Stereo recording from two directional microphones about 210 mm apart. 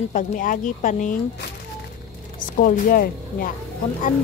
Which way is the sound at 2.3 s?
40° left (ahead or behind).